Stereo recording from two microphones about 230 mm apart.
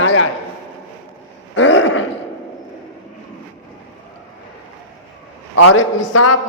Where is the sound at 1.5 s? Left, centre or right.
Left.